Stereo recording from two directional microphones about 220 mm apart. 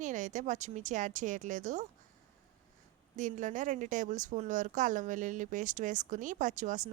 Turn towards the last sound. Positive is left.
turn(degrees=-35)  # may be behind; listen again after turning